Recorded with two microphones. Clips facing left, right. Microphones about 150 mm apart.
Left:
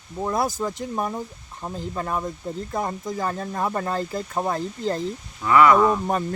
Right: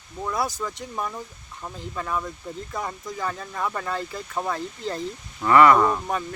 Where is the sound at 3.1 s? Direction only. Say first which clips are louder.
Left 4 dB; 40° left (ahead or behind).